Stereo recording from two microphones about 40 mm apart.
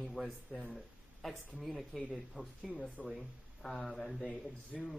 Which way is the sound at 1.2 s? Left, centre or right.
Centre.